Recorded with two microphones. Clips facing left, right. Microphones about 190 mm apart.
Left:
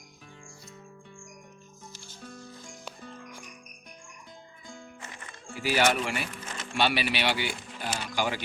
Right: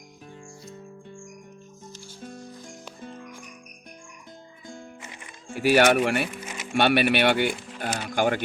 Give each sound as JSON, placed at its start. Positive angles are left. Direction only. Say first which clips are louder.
{"t": 4.6, "sound": "music", "louder": "right 5 dB", "side_deg": -55}
{"t": 5.5, "sound": "speech", "louder": "right 7 dB", "side_deg": -65}
{"t": 6.2, "sound": "music", "louder": "right 4 dB", "side_deg": -10}
{"t": 6.7, "sound": "speech", "louder": "right 7 dB", "side_deg": -55}